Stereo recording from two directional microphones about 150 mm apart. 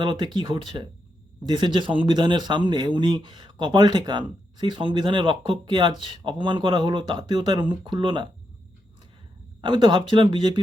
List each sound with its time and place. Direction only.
0.0 s speech: 30° right (ahead or behind)
9.6 s speech: 30° right (ahead or behind)